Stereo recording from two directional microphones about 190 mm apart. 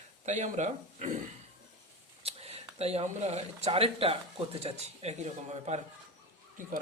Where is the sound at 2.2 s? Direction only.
30° right (ahead or behind).